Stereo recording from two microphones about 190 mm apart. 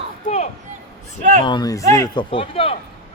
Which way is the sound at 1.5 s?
20° left (ahead or behind).